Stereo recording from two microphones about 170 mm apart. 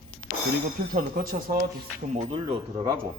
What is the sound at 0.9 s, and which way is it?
Speech, 55° right (ahead or behind).